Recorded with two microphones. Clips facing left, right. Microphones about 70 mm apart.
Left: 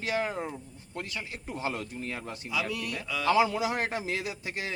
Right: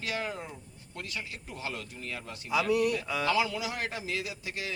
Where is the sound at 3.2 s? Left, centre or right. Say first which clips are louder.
Left 6 dB; left.